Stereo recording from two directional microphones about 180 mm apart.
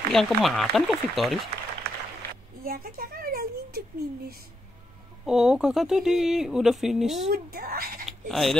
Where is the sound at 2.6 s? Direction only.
55° right (ahead or behind).